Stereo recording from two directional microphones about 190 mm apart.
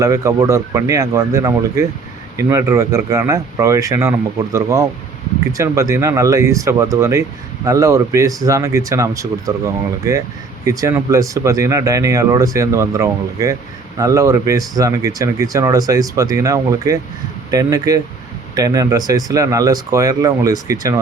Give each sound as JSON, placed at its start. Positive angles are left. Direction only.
{"t": 0.0, "sound": "speech", "side_deg": -15}